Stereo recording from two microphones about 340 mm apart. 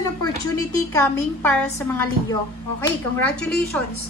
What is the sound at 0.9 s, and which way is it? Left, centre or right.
A woman's voice, centre.